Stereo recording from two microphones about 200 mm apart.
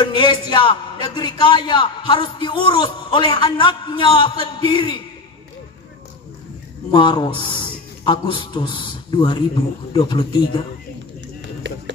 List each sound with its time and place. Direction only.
0.0 s a man's voice: 25° left (ahead or behind)
6.9 s a man's voice: 25° left (ahead or behind)
11.6 s music: 65° right (ahead or behind)